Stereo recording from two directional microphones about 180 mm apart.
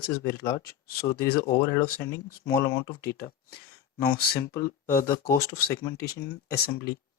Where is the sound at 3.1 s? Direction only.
60° left (ahead or behind).